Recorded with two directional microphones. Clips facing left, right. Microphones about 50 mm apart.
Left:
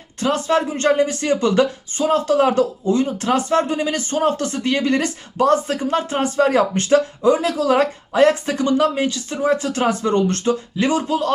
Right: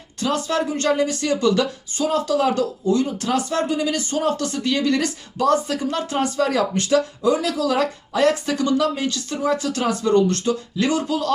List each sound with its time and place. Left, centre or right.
0.2 s speech: left